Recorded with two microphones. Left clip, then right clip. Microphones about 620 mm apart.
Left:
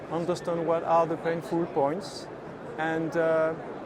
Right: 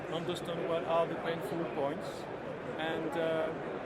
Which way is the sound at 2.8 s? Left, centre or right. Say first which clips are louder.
Left 8 dB; left.